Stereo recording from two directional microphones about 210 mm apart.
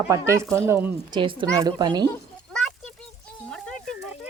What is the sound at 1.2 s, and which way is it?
Speech, 25° right (ahead or behind).